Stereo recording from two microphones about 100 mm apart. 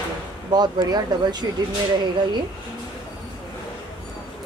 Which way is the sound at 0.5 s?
45° right (ahead or behind).